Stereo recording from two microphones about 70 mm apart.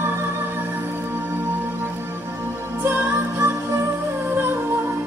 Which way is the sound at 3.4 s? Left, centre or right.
Right.